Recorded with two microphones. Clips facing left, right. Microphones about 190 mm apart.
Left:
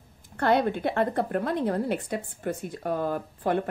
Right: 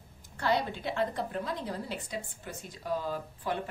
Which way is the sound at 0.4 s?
55° left (ahead or behind).